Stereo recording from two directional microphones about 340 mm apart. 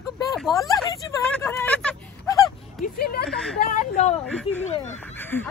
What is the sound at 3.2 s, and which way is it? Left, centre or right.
Speech, centre.